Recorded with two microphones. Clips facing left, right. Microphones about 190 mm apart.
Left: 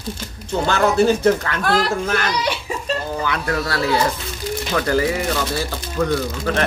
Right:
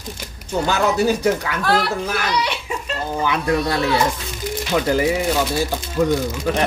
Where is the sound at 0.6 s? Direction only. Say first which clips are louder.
Left 2 dB; 10° right (ahead or behind).